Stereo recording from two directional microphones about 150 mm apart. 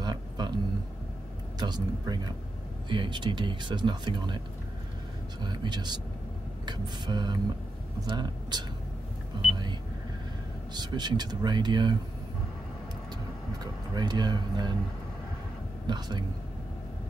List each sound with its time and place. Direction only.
0.0 s a sound: 30° right (ahead or behind)
1.6 s speech: 30° right (ahead or behind)
5.4 s speech: 30° right (ahead or behind)
9.3 s vehicle: 30° right (ahead or behind)
10.7 s speech: 30° right (ahead or behind)
13.9 s speech: 30° right (ahead or behind)
15.9 s speech: 30° right (ahead or behind)